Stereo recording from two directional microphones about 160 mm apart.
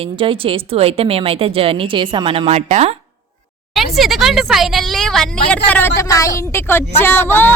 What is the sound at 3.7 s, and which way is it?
A woman's voice, centre (ahead or behind).